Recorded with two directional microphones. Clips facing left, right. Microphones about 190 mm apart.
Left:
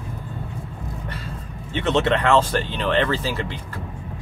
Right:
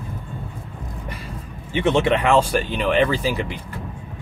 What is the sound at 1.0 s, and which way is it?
Speech, 10° right (ahead or behind).